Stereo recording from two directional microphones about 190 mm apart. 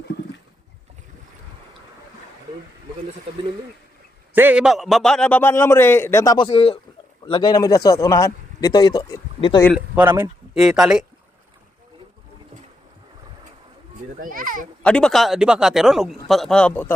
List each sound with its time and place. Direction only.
4.4 s a man's voice: 10° right (ahead or behind); by 9.6 s 20° left (ahead or behind)
9.7 s a man's voice: 10° right (ahead or behind)
14.2 s a child's voice: 45° right (ahead or behind)
14.8 s speech: 5° left (ahead or behind)